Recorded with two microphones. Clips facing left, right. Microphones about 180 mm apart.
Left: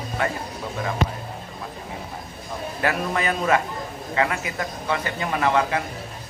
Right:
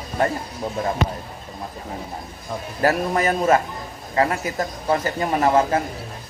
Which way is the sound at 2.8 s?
40° right (ahead or behind).